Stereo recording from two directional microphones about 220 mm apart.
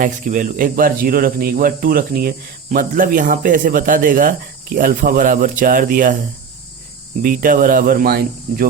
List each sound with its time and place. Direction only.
0.0 s speech: 35° right (ahead or behind)
7.2 s speech: 40° right (ahead or behind)